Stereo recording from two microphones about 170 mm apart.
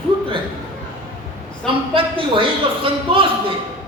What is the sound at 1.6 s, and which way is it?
A man's voice, 30° right (ahead or behind).